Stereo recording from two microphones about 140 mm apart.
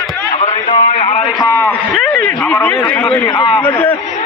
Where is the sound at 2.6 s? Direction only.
15° left (ahead or behind).